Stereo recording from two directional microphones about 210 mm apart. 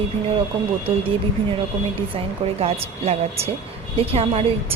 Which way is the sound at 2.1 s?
30° right (ahead or behind).